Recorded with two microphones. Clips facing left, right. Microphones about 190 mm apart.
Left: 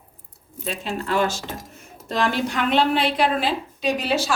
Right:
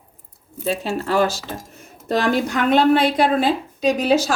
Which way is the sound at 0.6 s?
40° right (ahead or behind).